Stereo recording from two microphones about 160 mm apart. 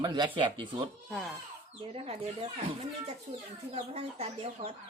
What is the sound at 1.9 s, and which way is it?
Speech, 40° right (ahead or behind).